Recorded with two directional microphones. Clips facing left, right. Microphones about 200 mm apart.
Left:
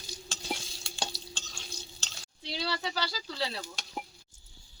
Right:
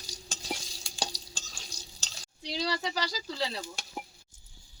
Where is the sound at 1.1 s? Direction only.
40° right (ahead or behind).